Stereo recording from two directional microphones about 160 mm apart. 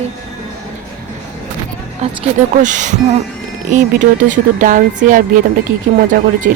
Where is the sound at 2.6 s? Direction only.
50° right (ahead or behind).